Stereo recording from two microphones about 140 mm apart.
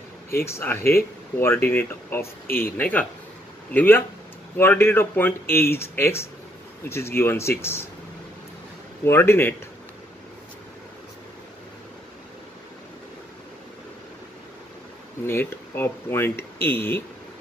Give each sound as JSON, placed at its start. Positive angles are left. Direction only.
{"t": 0.5, "sound": "speech", "side_deg": 15}
{"t": 2.4, "sound": "speech", "side_deg": 90}
{"t": 2.8, "sound": "speech", "side_deg": 10}
{"t": 9.0, "sound": "speech", "side_deg": 15}
{"t": 15.2, "sound": "speech", "side_deg": 15}